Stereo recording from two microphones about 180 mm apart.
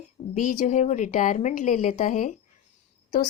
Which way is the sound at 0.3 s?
45° left (ahead or behind).